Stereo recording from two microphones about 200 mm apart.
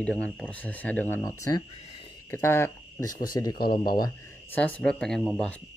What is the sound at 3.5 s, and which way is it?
Speech, 50° left (ahead or behind).